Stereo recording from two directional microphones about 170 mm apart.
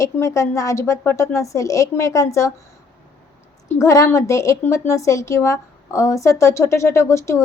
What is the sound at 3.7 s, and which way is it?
A woman's voice, 20° left (ahead or behind).